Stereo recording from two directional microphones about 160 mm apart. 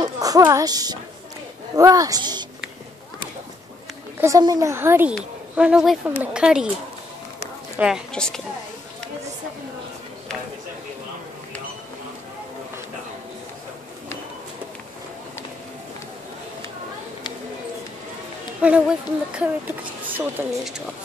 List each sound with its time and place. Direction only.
0.0 s a woman's voice: 25° right (ahead or behind)
4.2 s speech: 20° right (ahead or behind)
5.1 s a woman's voice: 5° right (ahead or behind)
7.7 s speech: 5° right (ahead or behind)
18.6 s speech: 5° right (ahead or behind)